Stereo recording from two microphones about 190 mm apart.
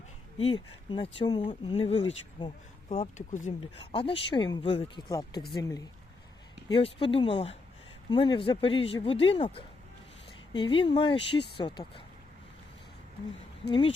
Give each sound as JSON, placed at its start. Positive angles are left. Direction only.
{"t": 0.3, "sound": "speech", "side_deg": 30}
{"t": 3.0, "sound": "speech", "side_deg": 40}
{"t": 3.8, "sound": "speech", "side_deg": 30}